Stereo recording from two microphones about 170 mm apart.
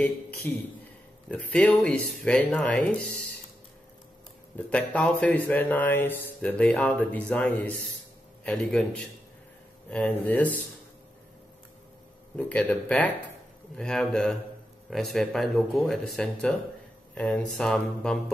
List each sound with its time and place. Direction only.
0.5 s speech: 10° left (ahead or behind)
4.6 s speech: 5° left (ahead or behind)
12.4 s speech: 10° left (ahead or behind)